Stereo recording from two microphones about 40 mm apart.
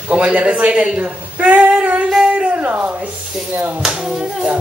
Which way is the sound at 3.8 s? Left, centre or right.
Centre.